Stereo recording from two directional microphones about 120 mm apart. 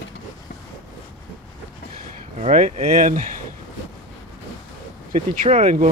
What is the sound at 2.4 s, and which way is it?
Speech, 70° right (ahead or behind).